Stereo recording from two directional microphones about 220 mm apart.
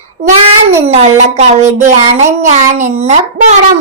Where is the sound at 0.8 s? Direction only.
25° right (ahead or behind).